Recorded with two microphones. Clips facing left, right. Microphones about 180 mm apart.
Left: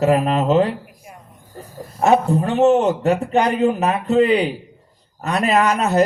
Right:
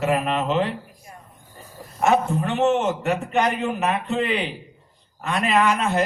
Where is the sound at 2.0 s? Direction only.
35° left (ahead or behind).